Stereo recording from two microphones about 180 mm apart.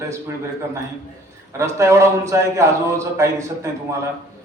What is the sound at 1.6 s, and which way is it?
A man's voice, 15° right (ahead or behind).